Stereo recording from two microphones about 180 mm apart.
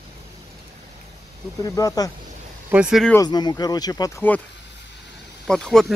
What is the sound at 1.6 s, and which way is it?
Speech, 20° left (ahead or behind).